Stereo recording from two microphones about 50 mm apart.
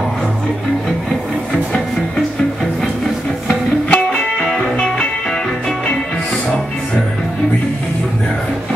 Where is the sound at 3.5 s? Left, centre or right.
Centre.